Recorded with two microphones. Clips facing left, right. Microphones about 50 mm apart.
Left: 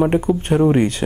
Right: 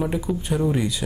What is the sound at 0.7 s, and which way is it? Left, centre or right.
Speech, left.